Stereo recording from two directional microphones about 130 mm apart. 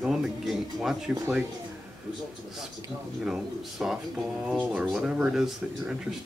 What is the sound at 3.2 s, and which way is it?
Speech, 5° right (ahead or behind).